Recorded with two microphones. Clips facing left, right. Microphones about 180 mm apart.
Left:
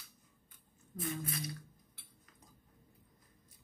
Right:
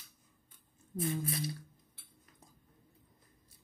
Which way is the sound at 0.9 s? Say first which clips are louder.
Right 5 dB; 25° right (ahead or behind).